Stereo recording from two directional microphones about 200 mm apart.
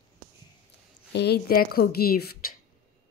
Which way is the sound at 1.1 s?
55° left (ahead or behind).